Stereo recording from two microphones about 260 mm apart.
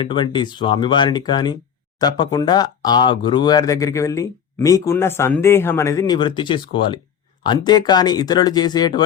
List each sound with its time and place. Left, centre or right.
0.0 s speech: centre